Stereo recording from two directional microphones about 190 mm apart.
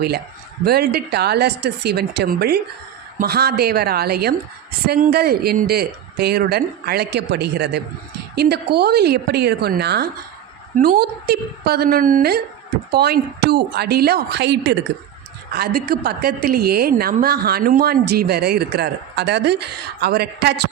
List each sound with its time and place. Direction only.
0.6 s a woman's voice: 55° right (ahead or behind)
15.5 s a woman's voice: 55° right (ahead or behind)